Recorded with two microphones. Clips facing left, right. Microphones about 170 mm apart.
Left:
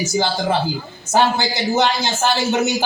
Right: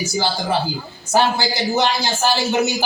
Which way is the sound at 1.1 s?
20° left (ahead or behind).